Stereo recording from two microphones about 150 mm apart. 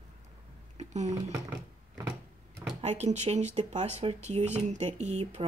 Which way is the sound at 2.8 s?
45° right (ahead or behind).